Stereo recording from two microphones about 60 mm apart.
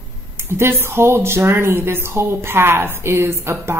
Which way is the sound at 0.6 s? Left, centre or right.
Right.